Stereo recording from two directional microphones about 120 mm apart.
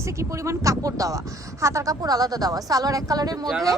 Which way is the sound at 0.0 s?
25° right (ahead or behind).